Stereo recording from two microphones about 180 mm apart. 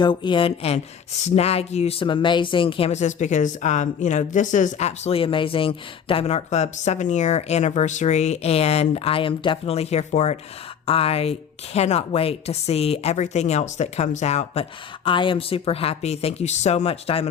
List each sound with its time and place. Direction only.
0.0 s speech: 25° left (ahead or behind)